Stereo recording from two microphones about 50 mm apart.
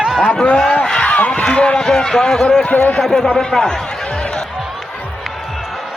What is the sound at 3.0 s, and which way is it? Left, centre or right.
Speech, centre.